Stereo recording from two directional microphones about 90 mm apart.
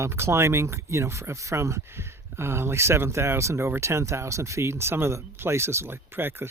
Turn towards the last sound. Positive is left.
turn(degrees=-25)  # may be behind; listen again after turning